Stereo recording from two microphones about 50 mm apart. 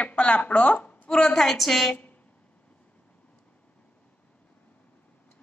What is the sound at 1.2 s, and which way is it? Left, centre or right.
Speech, centre.